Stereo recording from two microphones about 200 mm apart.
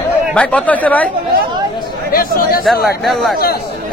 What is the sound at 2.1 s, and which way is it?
Speech, 50° left (ahead or behind).